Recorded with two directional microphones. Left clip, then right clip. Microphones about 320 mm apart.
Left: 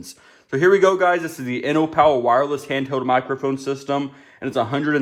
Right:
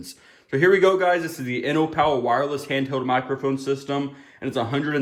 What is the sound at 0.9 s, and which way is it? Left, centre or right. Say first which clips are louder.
A man's voice: left 2 dB; centre.